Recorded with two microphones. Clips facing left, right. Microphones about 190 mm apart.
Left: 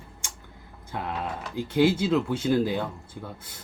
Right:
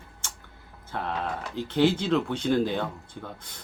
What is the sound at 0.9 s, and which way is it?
Speech, 10° left (ahead or behind).